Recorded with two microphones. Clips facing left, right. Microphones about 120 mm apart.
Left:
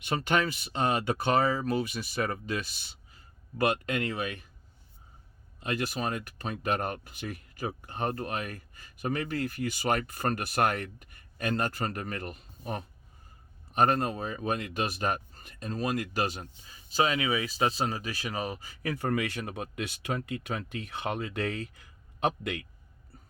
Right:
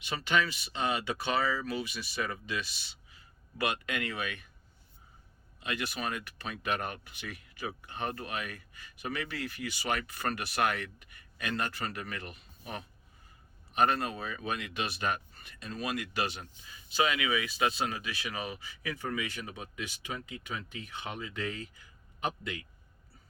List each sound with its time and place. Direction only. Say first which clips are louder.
0.0 s speech: left 3 dB; 50° left (ahead or behind)
5.5 s speech: left 4 dB; 40° left (ahead or behind); by 22.6 s 70° left (ahead or behind)